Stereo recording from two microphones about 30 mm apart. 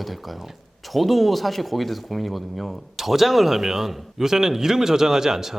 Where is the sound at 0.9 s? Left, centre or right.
Centre.